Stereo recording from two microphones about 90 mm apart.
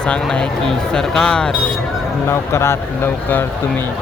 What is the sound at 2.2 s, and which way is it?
Speech, 30° left (ahead or behind).